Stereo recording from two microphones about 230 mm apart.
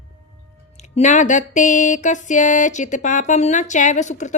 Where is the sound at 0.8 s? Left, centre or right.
Left.